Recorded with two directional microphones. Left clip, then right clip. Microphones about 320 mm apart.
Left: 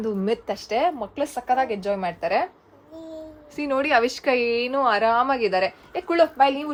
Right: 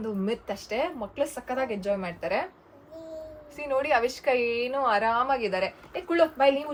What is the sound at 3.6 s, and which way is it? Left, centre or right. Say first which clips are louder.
A woman's voice: left 4 dB; left.